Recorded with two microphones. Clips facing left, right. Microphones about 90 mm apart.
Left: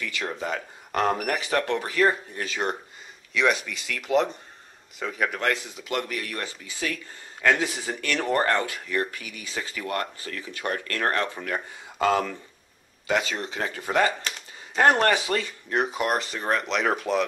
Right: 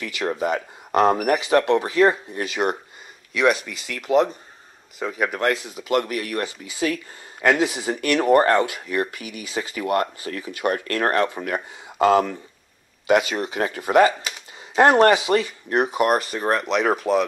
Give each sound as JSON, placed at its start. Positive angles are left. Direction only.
{"t": 0.3, "sound": "speech", "side_deg": -10}
{"t": 1.4, "sound": "speech", "side_deg": -20}
{"t": 15.0, "sound": "speech", "side_deg": -20}